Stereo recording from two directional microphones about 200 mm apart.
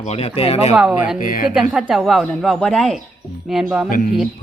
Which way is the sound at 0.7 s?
5° right (ahead or behind).